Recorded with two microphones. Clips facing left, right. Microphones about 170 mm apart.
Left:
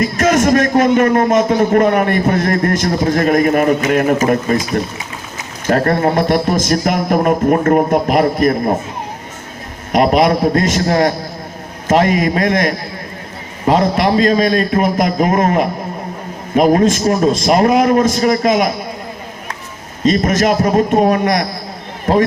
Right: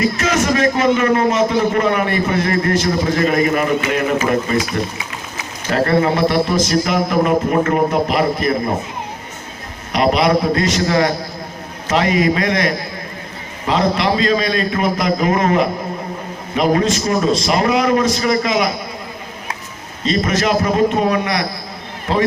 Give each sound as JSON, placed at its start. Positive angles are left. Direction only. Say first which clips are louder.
{"t": 0.0, "sound": "a man's voice", "louder": "left 4 dB", "side_deg": 50}
{"t": 9.9, "sound": "a man's voice", "louder": "left 3 dB", "side_deg": 50}
{"t": 20.1, "sound": "a man's voice", "louder": "left 4 dB", "side_deg": 45}